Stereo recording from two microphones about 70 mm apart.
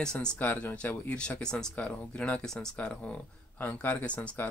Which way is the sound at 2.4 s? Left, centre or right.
Centre.